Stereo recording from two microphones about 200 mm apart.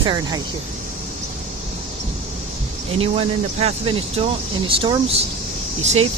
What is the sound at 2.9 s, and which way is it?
Speech, 30° right (ahead or behind).